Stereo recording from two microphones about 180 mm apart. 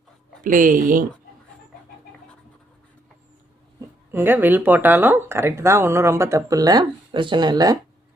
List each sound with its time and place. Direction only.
0.4 s speech: 50° right (ahead or behind)
3.8 s speech: 10° right (ahead or behind)